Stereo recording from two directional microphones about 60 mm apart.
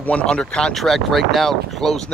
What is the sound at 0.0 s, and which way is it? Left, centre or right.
Speech, centre.